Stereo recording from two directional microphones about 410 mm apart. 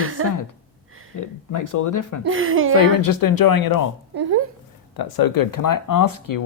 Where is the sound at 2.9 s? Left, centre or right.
Left.